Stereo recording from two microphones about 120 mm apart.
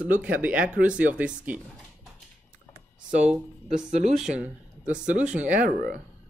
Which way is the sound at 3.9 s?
80° right.